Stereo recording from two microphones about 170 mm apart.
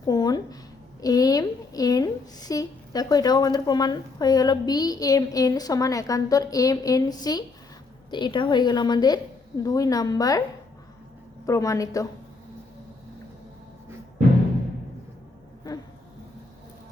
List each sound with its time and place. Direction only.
0.0 s a sound: 25° left (ahead or behind)
1.0 s a woman's voice: 20° left (ahead or behind)
11.4 s a woman's voice: 20° left (ahead or behind)